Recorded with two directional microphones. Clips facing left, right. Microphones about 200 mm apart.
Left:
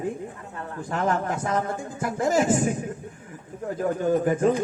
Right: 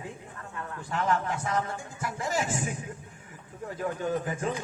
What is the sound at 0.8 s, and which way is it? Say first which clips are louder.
A man's voice: left 3 dB; 45° left (ahead or behind).